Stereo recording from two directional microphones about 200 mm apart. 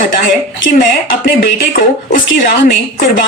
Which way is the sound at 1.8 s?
50° left (ahead or behind).